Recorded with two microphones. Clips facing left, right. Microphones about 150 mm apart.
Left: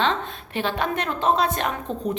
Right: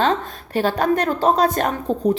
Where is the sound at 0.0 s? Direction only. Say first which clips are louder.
Right 4 dB; 40° right (ahead or behind).